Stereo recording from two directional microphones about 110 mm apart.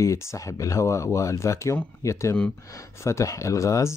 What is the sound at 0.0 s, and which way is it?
Speech, 30° left (ahead or behind).